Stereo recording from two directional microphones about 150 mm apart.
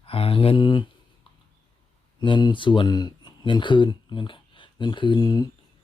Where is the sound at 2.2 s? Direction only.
30° left (ahead or behind).